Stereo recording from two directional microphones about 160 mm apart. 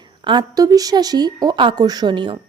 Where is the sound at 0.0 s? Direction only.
30° right (ahead or behind).